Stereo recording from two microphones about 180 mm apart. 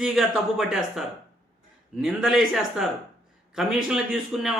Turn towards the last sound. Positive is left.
turn(degrees=0)  # may be behind; listen again after turning